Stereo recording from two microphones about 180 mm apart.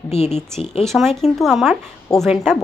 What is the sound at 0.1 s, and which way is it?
Speech, 35° left (ahead or behind).